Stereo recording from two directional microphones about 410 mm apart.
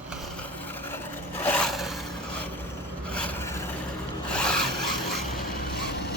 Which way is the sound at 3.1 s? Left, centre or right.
Centre.